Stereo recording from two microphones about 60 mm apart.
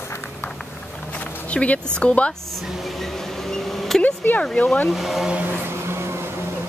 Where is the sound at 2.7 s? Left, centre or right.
Centre.